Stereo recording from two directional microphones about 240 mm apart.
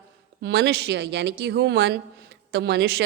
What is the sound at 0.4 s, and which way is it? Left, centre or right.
Speech, right.